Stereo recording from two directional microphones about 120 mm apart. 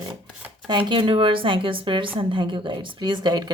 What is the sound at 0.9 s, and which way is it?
Speech, 45° right (ahead or behind).